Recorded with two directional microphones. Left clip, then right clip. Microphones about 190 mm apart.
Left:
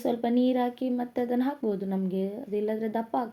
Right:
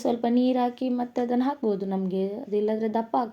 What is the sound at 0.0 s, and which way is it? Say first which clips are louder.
A woman's voice: right 2 dB; 20° right (ahead or behind).